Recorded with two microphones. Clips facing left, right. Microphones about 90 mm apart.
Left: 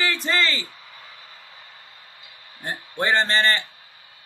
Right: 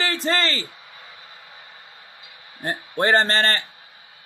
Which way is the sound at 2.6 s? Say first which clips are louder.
Right 3 dB; 40° right (ahead or behind).